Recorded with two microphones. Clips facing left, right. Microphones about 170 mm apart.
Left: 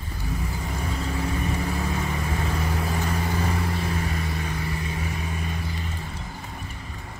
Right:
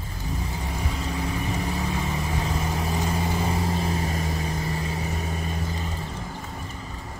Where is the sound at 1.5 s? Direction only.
20° right (ahead or behind); by 5.9 s 40° right (ahead or behind).